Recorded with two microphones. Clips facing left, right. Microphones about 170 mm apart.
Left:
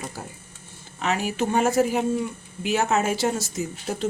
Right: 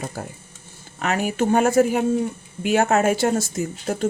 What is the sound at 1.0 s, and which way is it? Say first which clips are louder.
Speech: right 3 dB; 55° right (ahead or behind).